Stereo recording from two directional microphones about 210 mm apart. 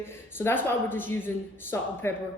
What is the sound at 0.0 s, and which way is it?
Speech, 10° left (ahead or behind).